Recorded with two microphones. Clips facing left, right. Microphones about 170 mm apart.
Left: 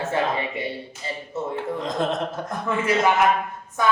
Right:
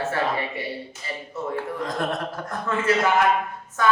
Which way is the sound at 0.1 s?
20° left (ahead or behind).